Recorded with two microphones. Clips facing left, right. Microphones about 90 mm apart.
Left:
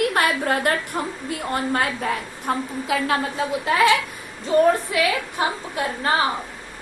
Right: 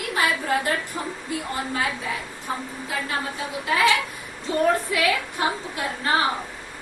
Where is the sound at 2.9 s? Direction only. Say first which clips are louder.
Left 7 dB; 90° left.